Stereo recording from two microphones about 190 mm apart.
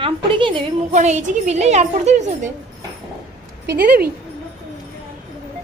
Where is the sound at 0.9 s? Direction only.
35° right (ahead or behind).